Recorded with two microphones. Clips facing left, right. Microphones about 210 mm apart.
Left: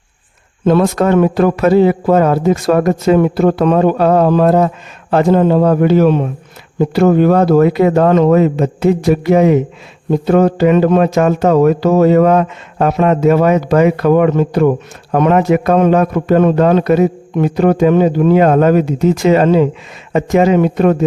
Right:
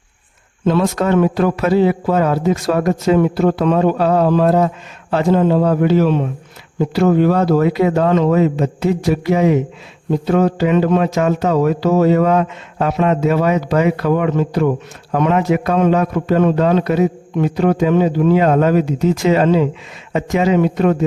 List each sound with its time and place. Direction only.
0.6 s a man's voice: 50° left (ahead or behind)